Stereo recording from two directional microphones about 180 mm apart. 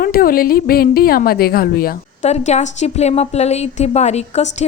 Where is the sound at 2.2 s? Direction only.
40° left (ahead or behind).